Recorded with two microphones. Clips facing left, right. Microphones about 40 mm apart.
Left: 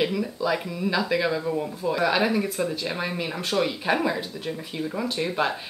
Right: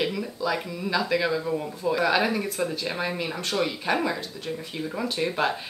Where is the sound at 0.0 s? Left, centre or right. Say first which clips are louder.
Left 2 dB; centre.